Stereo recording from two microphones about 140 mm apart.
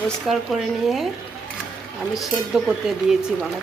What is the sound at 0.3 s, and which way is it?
Speech, centre (ahead or behind).